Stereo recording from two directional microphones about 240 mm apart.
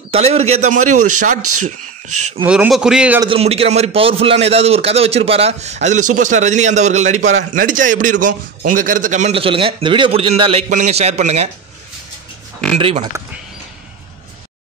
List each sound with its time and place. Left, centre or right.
0.1 s a man's voice: right
0.9 s speech: right
2.4 s a man's voice: centre
3.2 s a man's voice: right
8.2 s a man's voice: right
8.7 s a man's voice: right
12.7 s a man's voice: right